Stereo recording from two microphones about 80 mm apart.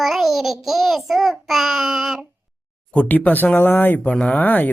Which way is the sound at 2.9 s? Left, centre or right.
Centre.